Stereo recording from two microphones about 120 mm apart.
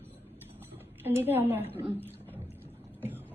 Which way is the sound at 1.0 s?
20° right (ahead or behind).